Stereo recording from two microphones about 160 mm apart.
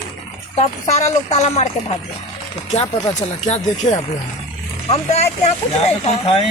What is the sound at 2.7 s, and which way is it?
Speech, 45° left (ahead or behind).